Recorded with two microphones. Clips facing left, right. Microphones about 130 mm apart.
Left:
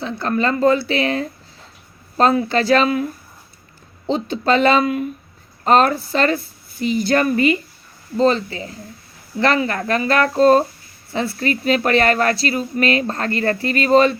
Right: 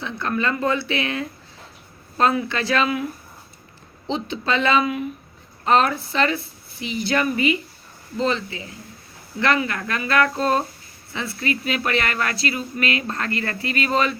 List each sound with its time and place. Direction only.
0.0 s speech: 35° left (ahead or behind)
4.1 s a woman's voice: 40° left (ahead or behind)